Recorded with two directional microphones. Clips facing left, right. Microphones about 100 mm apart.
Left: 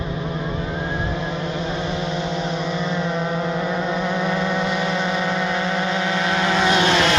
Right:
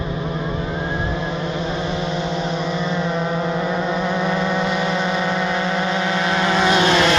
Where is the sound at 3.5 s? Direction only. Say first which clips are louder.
Right 2 dB; 35° right (ahead or behind).